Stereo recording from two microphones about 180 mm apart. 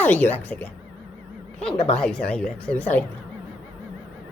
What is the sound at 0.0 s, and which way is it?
Speech, 10° left (ahead or behind).